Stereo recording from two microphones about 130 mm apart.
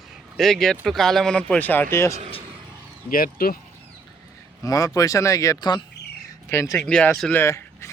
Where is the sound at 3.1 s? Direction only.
90° left.